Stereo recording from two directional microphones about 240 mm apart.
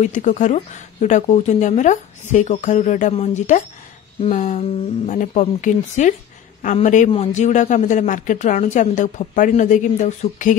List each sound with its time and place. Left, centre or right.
0.0 s a man's voice: left